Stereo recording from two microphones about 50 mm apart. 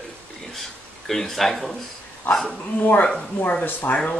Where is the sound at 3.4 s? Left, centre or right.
Left.